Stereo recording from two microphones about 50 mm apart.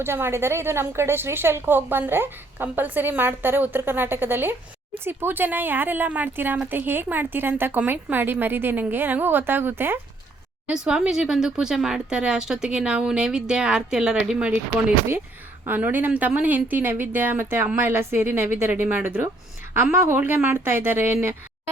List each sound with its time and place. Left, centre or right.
0.0 s a woman's voice: right
10.7 s a woman's voice: centre
15.6 s a woman's voice: right
18.9 s speech: right
19.7 s a woman's voice: right
20.1 s a woman's voice: right